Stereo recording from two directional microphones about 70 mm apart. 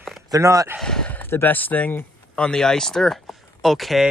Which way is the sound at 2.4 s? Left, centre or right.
Centre.